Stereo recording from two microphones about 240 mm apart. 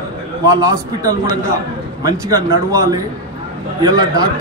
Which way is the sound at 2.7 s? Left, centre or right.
Centre.